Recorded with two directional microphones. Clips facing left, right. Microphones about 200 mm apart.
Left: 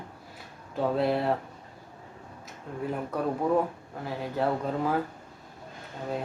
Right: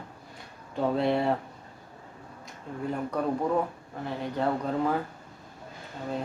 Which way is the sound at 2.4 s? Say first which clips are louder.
Even; 5° left (ahead or behind).